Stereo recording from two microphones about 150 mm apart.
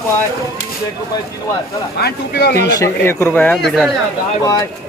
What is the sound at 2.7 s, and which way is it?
Speech, 20° left (ahead or behind).